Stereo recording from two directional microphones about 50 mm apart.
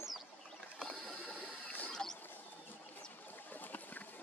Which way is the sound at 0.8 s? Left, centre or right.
Centre.